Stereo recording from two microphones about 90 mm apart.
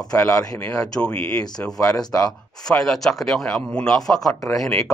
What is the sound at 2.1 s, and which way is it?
Speech, 25° left (ahead or behind).